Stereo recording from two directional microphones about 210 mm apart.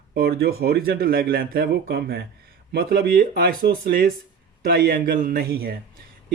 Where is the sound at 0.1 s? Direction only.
50° right (ahead or behind).